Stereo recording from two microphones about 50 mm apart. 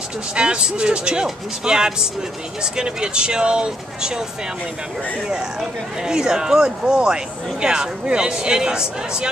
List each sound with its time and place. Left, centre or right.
0.4 s speech: centre
5.3 s speech: centre